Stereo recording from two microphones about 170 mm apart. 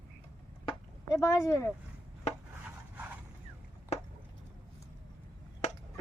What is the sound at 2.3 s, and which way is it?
Chopping, 40° left (ahead or behind).